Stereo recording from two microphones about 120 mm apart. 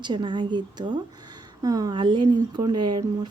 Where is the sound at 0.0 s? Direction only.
40° right (ahead or behind).